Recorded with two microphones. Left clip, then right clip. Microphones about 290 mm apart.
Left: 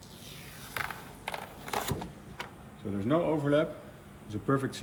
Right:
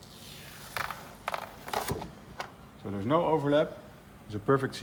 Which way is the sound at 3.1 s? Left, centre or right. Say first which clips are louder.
Right 2 dB; centre.